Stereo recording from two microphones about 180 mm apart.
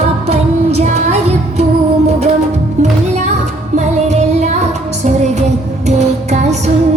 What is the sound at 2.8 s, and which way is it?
Music, 40° right (ahead or behind).